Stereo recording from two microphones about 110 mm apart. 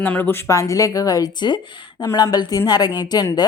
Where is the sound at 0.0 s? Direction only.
15° left (ahead or behind).